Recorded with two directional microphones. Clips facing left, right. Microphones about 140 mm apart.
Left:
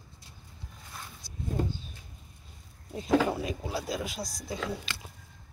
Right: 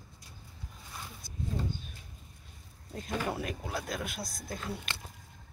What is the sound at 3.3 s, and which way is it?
Speech, centre (ahead or behind).